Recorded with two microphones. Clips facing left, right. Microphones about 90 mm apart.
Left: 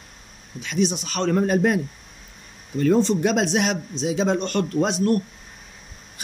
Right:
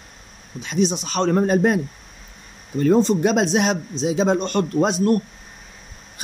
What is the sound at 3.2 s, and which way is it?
A man's voice, 20° right (ahead or behind).